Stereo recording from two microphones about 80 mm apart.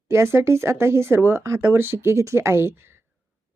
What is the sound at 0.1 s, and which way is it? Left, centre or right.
Speech, right.